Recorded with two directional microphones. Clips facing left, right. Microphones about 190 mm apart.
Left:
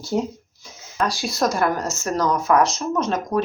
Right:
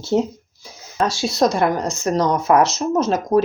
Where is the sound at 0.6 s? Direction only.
30° right (ahead or behind).